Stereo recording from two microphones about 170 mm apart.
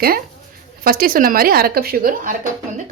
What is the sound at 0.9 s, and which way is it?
Speech, 60° right (ahead or behind).